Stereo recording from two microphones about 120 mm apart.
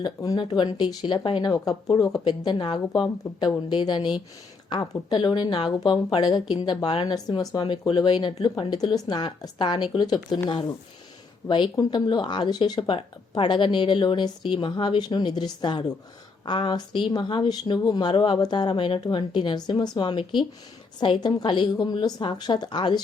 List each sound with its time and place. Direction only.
0.0 s speech: 30° left (ahead or behind)
11.4 s speech: 40° left (ahead or behind)